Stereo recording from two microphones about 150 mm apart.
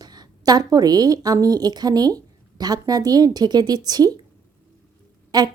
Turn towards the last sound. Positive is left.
turn(degrees=-25)  # may be behind; listen again after turning